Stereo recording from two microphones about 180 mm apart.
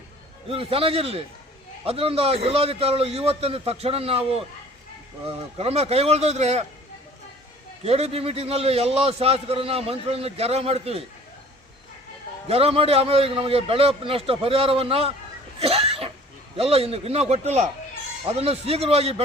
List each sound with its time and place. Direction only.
0.4 s a man's voice: 30° right (ahead or behind)
7.9 s a man's voice: 35° right (ahead or behind)
12.5 s a man's voice: 35° right (ahead or behind)
15.5 s cough: 35° right (ahead or behind)
16.6 s a man's voice: 35° right (ahead or behind)